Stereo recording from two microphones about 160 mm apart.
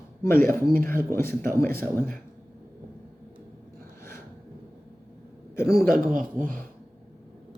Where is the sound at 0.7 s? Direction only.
65° right (ahead or behind).